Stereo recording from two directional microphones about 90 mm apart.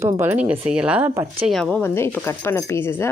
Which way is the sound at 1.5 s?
5° left (ahead or behind).